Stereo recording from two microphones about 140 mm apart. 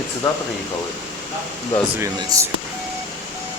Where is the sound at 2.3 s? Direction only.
25° right (ahead or behind).